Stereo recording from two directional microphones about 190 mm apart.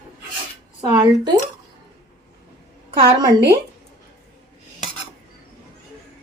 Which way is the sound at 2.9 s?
25° right (ahead or behind).